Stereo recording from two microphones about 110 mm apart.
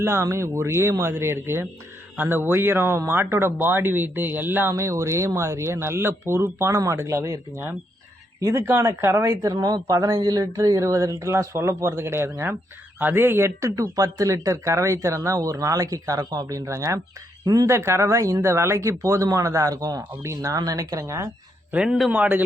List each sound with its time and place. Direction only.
0.0 s speech: 25° right (ahead or behind)
21.7 s a man's voice: 10° right (ahead or behind)
22.1 s a man's voice: 15° right (ahead or behind)